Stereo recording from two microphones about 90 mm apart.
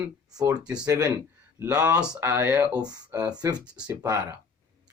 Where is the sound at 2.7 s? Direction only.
45° right (ahead or behind).